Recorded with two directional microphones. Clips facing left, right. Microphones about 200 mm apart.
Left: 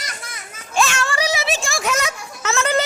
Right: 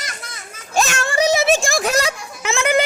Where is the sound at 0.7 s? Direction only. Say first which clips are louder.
Right 2 dB; 45° right (ahead or behind).